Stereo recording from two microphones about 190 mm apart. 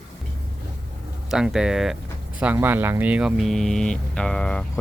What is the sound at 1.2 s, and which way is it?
Speech, 5° right (ahead or behind).